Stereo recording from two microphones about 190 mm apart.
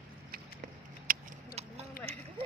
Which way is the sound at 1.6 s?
35° right (ahead or behind).